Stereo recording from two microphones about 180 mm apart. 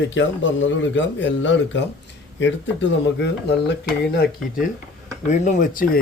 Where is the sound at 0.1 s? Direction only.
90° left.